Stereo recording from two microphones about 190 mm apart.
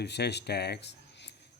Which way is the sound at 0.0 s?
65° left (ahead or behind).